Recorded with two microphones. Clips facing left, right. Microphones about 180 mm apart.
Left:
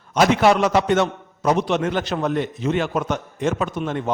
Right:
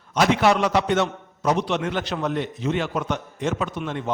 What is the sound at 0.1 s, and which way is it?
A man's voice, 45° left (ahead or behind).